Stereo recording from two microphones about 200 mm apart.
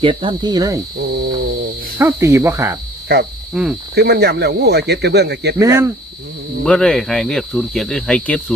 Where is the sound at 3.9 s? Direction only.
55° right (ahead or behind).